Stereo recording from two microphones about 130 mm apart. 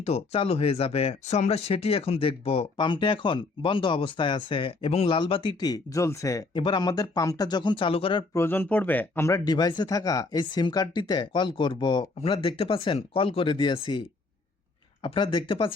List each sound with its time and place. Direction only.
0.0 s speech: 55° left (ahead or behind)
2.7 s speech: 35° left (ahead or behind)
6.5 s speech: 35° left (ahead or behind)
8.3 s speech: 15° left (ahead or behind)
9.4 s speech: 30° left (ahead or behind)
15.0 s speech: 40° left (ahead or behind)